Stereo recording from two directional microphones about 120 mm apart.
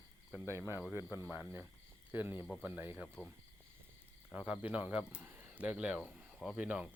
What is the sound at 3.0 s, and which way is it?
Speech, 15° left (ahead or behind).